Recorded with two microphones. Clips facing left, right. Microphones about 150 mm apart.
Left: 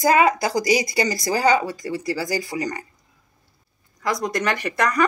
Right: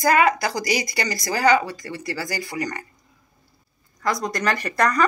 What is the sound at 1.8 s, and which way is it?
Speech, 15° left (ahead or behind).